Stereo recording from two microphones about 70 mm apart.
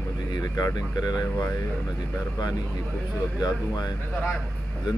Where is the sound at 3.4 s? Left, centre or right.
Left.